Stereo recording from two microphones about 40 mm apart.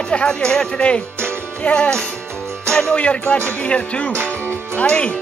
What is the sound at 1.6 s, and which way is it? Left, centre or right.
Speech, left.